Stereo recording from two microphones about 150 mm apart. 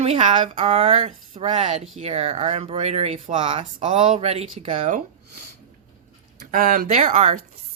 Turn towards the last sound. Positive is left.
turn(degrees=-50)  # may be behind; listen again after turning